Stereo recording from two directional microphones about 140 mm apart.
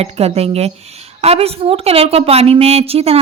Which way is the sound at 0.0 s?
45° right (ahead or behind).